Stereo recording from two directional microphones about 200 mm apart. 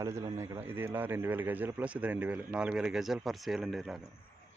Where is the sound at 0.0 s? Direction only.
15° right (ahead or behind); by 4.0 s centre (ahead or behind).